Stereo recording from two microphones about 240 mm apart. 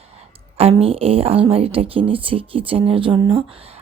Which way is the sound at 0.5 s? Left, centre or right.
Right.